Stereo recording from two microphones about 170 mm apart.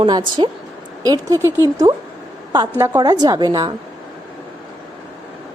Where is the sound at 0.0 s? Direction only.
30° right (ahead or behind).